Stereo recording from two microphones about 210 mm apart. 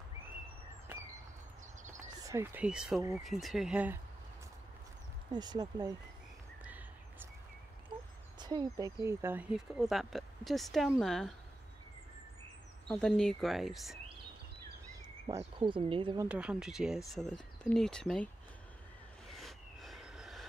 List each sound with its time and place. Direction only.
2.1 s speech: 15° right (ahead or behind)
5.3 s speech: 20° right (ahead or behind)
6.6 s a sound: 10° right (ahead or behind)
8.4 s speech: 20° right (ahead or behind); by 11.3 s centre (ahead or behind)
12.8 s speech: 5° left (ahead or behind)
15.2 s speech: 20° right (ahead or behind)
16.3 s speech: 5° right (ahead or behind)
19.2 s vehicle: centre (ahead or behind)